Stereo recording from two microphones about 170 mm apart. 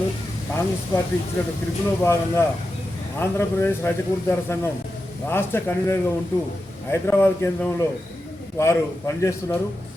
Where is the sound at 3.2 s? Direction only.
15° left (ahead or behind).